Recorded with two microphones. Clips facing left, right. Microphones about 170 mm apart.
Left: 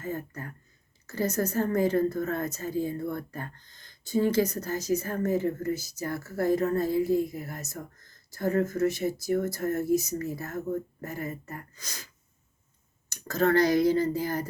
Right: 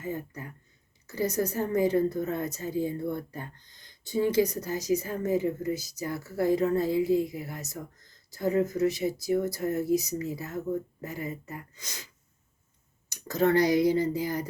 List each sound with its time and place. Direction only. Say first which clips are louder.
0.0 s a woman's voice: even; 15° right (ahead or behind)
6.1 s speech: even; 45° left (ahead or behind)
8.4 s a woman's voice: even; 15° right (ahead or behind)
8.8 s speech: even; 50° left (ahead or behind)
11.7 s speech: even; 20° right (ahead or behind)
13.1 s speech: even; 15° right (ahead or behind)